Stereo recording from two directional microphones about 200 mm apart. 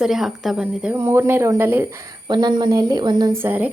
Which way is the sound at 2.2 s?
25° right (ahead or behind).